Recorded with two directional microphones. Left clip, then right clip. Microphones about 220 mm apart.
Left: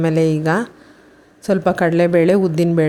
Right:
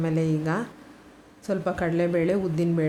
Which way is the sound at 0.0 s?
35° left (ahead or behind).